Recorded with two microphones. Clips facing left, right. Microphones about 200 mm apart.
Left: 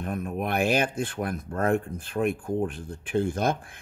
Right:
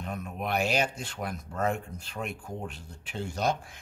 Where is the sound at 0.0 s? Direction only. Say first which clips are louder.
Left 5 dB; 55° left (ahead or behind).